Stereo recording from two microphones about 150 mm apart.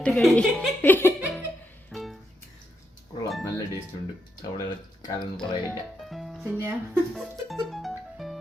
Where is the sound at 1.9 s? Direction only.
Centre (ahead or behind).